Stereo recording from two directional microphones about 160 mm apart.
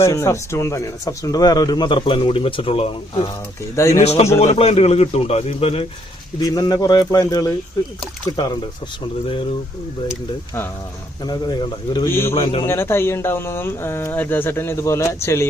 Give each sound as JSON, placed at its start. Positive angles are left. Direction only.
{"t": 0.0, "sound": "speech", "side_deg": 15}
{"t": 3.8, "sound": "speech", "side_deg": 20}
{"t": 4.0, "sound": "speech", "side_deg": 40}
{"t": 6.4, "sound": "speech", "side_deg": 25}
{"t": 11.2, "sound": "speech", "side_deg": 25}
{"t": 12.6, "sound": "speech", "side_deg": 15}